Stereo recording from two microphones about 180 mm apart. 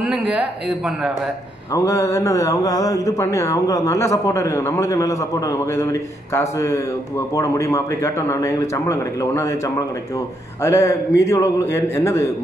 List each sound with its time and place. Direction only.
0.0 s speech: 5° right (ahead or behind)
1.7 s speech: 15° left (ahead or behind)